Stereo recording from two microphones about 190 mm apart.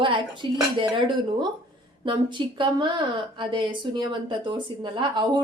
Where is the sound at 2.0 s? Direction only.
25° right (ahead or behind).